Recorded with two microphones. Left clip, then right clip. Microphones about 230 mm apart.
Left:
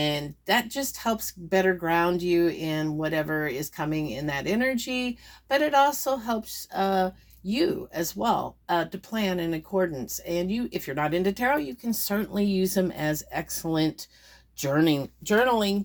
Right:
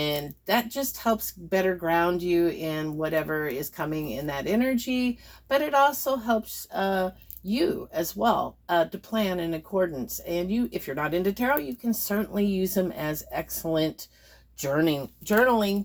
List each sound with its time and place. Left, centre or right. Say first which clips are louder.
0.0 s speech: left 1 dB; left